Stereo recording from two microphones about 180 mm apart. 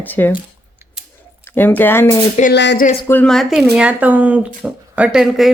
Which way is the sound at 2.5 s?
70° left (ahead or behind).